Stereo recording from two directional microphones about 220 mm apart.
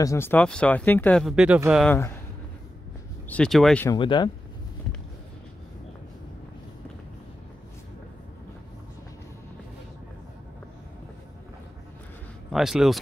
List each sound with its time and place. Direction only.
0.0 s speech: 10° left (ahead or behind); by 1.9 s 5° right (ahead or behind)
1.9 s speech: 10° left (ahead or behind)
3.3 s speech: 5° left (ahead or behind)
3.9 s speech: 20° left (ahead or behind)
12.4 s speech: centre (ahead or behind)